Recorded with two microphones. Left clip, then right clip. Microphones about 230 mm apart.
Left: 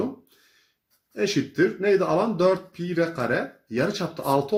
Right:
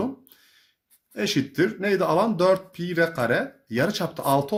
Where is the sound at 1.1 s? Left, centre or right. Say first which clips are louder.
Left 1 dB; right.